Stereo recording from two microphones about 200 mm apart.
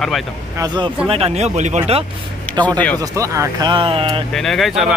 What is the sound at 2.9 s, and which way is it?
Speech, 15° right (ahead or behind).